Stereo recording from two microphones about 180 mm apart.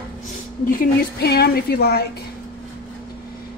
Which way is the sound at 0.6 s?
55° left (ahead or behind).